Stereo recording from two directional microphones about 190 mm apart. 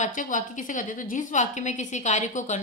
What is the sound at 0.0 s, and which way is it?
A woman's voice, 45° left (ahead or behind).